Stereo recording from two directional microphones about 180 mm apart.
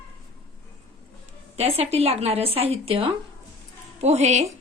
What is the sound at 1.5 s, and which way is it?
Speech, 35° right (ahead or behind).